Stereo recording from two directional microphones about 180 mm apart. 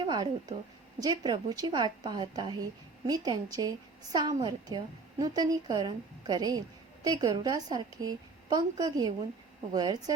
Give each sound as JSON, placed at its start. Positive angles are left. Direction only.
{"t": 0.0, "sound": "a woman's voice", "side_deg": -25}